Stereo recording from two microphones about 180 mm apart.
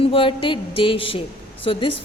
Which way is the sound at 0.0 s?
30° left (ahead or behind).